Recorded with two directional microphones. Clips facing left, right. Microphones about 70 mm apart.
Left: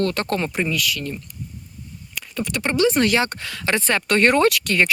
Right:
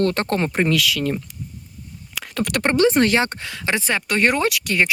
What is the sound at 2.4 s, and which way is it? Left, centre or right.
Speech, right.